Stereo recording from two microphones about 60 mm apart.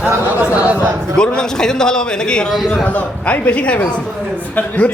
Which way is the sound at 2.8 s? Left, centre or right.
Left.